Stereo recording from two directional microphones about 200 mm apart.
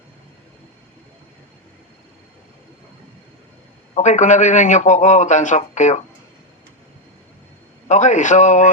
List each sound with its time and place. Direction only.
3.9 s a man's voice: 35° left (ahead or behind)
7.9 s a man's voice: 35° left (ahead or behind)